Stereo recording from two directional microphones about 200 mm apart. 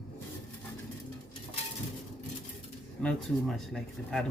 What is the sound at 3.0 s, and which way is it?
Speech, centre (ahead or behind).